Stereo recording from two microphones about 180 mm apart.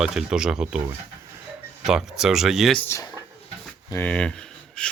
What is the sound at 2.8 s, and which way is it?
Speech, 15° left (ahead or behind).